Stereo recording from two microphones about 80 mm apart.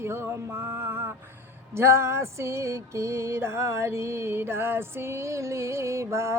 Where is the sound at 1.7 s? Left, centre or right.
Right.